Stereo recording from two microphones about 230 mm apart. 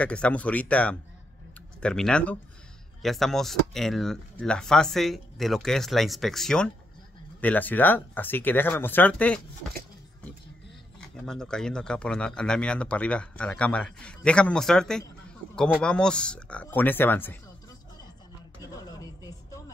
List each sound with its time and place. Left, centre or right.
0.0 s speech: centre
11.0 s speech: centre
18.6 s a sound: centre